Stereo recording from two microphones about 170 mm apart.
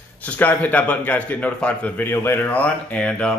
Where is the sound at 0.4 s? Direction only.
10° left (ahead or behind).